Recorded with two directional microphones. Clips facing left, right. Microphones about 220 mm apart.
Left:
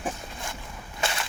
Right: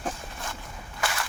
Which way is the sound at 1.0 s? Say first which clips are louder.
Left 1 dB; 25° left (ahead or behind).